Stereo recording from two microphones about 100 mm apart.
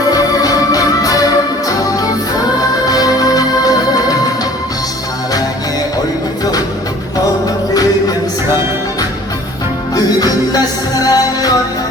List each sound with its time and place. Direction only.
0.1 s music: 40° left (ahead or behind)
9.9 s music: 40° left (ahead or behind)